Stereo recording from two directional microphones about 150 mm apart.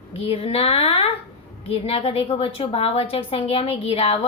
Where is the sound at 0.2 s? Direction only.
40° left (ahead or behind).